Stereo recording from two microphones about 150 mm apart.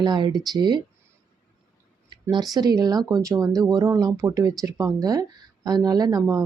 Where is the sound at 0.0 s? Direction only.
30° right (ahead or behind).